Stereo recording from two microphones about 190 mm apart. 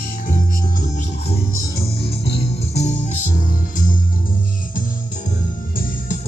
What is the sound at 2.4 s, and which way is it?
Music, 35° left (ahead or behind).